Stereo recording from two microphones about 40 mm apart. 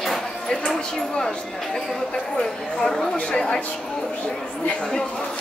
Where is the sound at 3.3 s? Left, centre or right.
Left.